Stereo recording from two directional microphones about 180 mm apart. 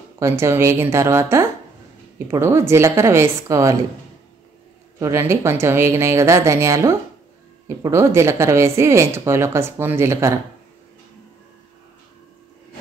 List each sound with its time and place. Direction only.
0.2 s speech: 15° right (ahead or behind)
4.9 s speech: 15° right (ahead or behind)